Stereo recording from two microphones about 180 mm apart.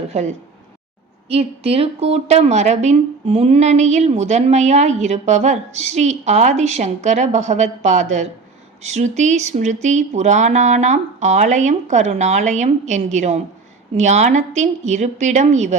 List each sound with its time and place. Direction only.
0.1 s a woman's voice: 40° right (ahead or behind)